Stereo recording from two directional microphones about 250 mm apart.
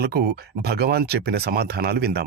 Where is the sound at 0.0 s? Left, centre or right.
Right.